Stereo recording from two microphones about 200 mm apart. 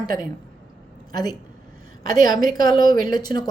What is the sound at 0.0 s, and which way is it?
A woman's voice, 20° left (ahead or behind).